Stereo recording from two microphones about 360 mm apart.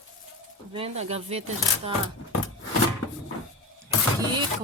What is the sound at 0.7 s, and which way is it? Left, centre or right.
Speech, centre.